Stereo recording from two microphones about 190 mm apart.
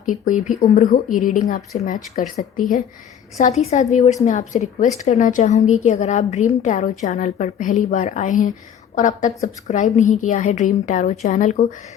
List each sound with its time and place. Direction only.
0.0 s a woman's voice: 40° left (ahead or behind)